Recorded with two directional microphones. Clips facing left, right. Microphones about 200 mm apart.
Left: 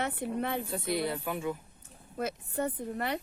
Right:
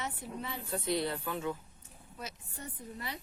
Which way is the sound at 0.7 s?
10° left (ahead or behind).